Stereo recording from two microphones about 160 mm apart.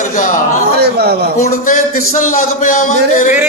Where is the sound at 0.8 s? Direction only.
85° right.